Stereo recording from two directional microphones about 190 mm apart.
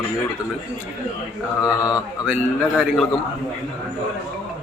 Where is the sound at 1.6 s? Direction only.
5° right (ahead or behind).